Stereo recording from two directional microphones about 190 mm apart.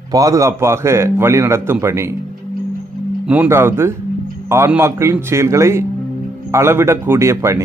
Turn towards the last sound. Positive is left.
turn(degrees=-15)  # may be behind; listen again after turning